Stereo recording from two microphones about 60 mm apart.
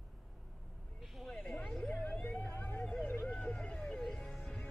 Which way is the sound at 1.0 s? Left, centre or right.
Centre.